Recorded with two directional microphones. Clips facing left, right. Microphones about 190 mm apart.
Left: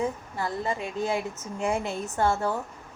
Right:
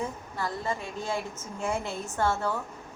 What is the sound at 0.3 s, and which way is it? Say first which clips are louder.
A woman's voice: right 1 dB; 15° left (ahead or behind).